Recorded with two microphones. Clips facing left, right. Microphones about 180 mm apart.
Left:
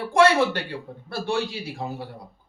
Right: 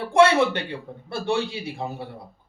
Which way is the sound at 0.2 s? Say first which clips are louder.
Right 1 dB; 20° right (ahead or behind).